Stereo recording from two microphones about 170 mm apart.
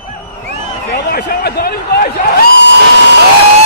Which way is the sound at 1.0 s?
65° left (ahead or behind).